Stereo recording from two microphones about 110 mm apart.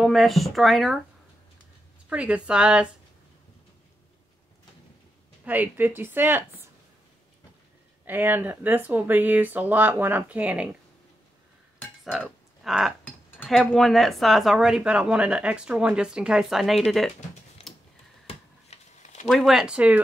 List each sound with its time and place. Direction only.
0.0 s a woman's voice: centre (ahead or behind)
2.0 s speech: 10° right (ahead or behind)
5.4 s speech: 15° right (ahead or behind)
8.1 s speech: 15° right (ahead or behind)
12.6 s a sound: 5° right (ahead or behind)
13.7 s a woman's voice: centre (ahead or behind)
17.7 s a sound: 5° left (ahead or behind)
18.2 s a sound: 80° left
19.2 s a woman's voice: centre (ahead or behind)